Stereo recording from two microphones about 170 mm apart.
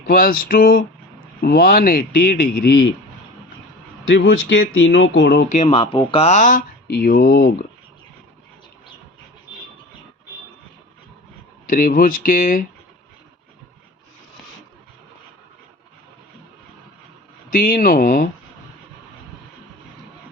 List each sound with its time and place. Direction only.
0.1 s speech: 60° left (ahead or behind)
4.1 s speech: 90° left
5.6 s speech: 35° left (ahead or behind)
6.8 s speech: 60° left (ahead or behind)
11.6 s speech: 55° left (ahead or behind)
17.5 s speech: 55° left (ahead or behind)